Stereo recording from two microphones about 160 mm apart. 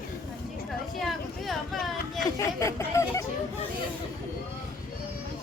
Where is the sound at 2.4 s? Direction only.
20° left (ahead or behind).